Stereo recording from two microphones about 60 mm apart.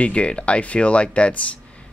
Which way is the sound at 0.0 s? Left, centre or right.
Centre.